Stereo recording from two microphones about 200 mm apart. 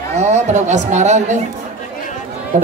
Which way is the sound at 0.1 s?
35° right (ahead or behind).